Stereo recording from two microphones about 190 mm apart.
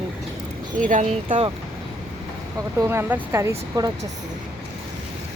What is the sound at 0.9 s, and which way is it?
Speech, 40° right (ahead or behind).